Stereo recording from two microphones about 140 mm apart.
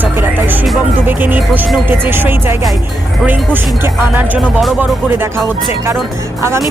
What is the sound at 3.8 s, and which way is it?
Speech, 15° right (ahead or behind).